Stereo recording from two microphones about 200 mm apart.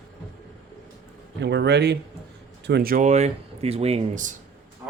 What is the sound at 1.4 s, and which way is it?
A man's voice, 60° right (ahead or behind).